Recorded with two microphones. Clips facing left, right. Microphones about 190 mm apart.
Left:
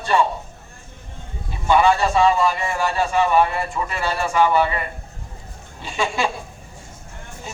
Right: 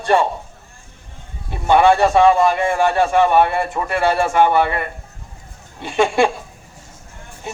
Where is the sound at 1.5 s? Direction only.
55° right (ahead or behind).